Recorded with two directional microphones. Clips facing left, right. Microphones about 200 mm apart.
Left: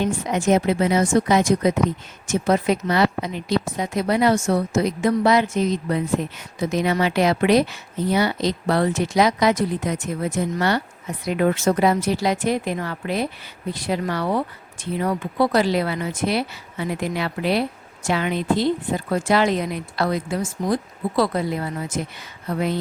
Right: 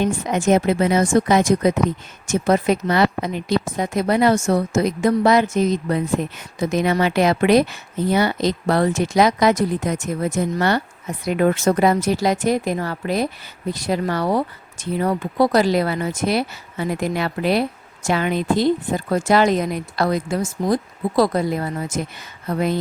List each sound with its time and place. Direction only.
0.0 s speech: 50° right (ahead or behind)